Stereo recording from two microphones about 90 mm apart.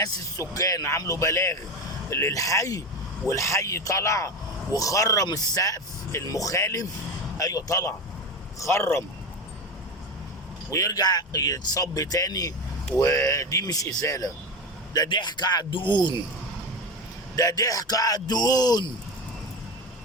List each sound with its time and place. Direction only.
0.0 s speech: 40° left (ahead or behind)
10.7 s speech: 40° left (ahead or behind)
14.9 s speech: 50° left (ahead or behind)
17.3 s speech: 40° left (ahead or behind)